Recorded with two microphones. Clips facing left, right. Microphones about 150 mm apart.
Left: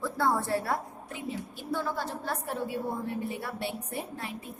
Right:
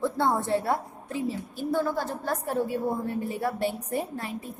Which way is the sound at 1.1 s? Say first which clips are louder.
Right 7 dB; 40° right (ahead or behind).